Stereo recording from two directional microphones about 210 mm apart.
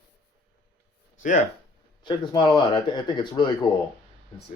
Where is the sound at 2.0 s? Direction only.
20° left (ahead or behind).